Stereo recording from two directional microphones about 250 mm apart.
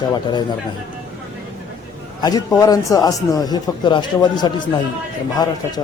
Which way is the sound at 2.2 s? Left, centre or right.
Centre.